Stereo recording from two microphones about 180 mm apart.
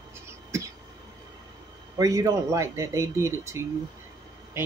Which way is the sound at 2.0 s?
20° right (ahead or behind).